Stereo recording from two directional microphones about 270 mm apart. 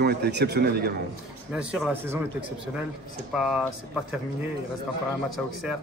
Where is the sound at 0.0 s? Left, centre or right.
Right.